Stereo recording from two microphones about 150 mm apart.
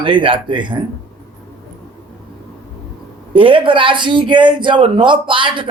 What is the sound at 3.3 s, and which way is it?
Speech, 35° right (ahead or behind).